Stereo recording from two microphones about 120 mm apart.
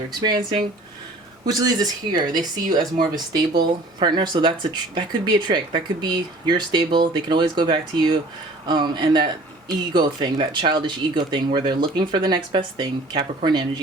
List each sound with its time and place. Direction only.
0.1 s speech: 35° right (ahead or behind)